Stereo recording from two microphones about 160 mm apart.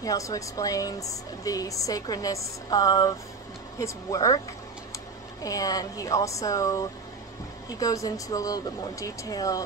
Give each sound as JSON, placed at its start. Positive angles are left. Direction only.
{"t": 0.0, "sound": "speech", "side_deg": 20}
{"t": 5.4, "sound": "speech", "side_deg": 20}